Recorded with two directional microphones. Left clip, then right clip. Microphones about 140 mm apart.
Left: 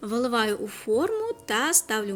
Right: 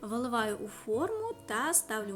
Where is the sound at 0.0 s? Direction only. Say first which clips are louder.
Left 7 dB; 20° left (ahead or behind).